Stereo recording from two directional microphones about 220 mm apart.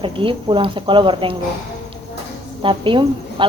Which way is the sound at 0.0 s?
25° right (ahead or behind).